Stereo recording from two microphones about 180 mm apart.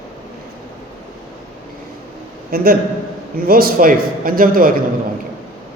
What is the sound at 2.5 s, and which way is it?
A man's voice, 55° right (ahead or behind).